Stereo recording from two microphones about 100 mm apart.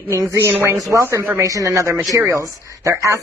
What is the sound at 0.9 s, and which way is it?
Speech, 30° right (ahead or behind).